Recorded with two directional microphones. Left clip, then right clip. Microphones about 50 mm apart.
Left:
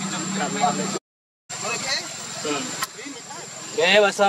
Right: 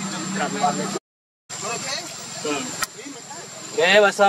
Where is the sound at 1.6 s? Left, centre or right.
Left.